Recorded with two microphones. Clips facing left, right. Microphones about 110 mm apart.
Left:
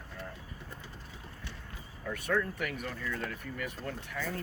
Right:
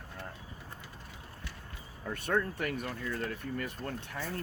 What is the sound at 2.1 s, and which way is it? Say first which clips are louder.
Speech: even; 30° right (ahead or behind).